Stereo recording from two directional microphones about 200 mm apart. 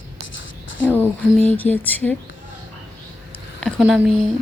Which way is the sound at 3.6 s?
Centre (ahead or behind).